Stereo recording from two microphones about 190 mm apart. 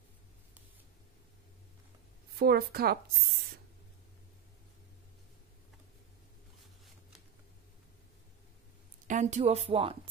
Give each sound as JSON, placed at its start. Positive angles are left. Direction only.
{"t": 2.3, "sound": "speech", "side_deg": -55}
{"t": 9.0, "sound": "speech", "side_deg": -40}